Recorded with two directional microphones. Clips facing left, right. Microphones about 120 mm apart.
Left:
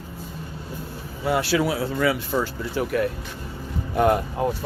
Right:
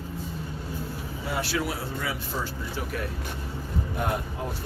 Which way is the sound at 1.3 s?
80° left.